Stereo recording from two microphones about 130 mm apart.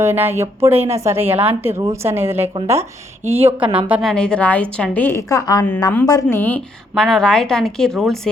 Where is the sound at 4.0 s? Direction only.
5° left (ahead or behind); by 5.6 s 30° left (ahead or behind).